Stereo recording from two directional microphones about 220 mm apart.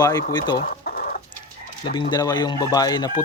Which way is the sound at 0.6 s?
40° left (ahead or behind).